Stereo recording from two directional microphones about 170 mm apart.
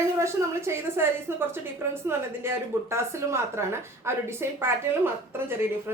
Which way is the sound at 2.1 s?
15° right (ahead or behind).